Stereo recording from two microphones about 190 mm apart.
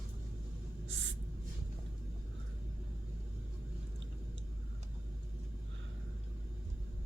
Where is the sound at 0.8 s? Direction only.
75° right (ahead or behind).